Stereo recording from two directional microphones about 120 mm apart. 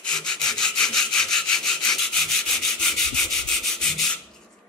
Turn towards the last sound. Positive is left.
turn(degrees=5)  # may be behind; listen again after turning